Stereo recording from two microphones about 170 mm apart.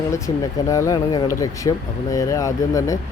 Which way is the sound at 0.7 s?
20° left (ahead or behind).